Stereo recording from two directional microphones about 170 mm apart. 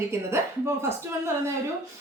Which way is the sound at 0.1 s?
15° right (ahead or behind).